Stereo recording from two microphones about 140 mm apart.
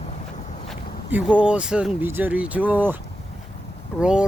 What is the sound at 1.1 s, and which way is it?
Speech, 10° right (ahead or behind).